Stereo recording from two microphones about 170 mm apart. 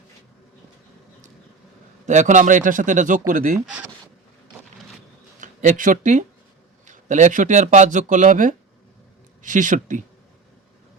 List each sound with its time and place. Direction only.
2.0 s speech: 45° right (ahead or behind)
5.4 s speech: 50° right (ahead or behind)